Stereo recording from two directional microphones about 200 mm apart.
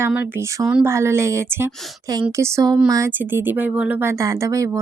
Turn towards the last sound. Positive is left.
turn(degrees=-15)  # may be behind; listen again after turning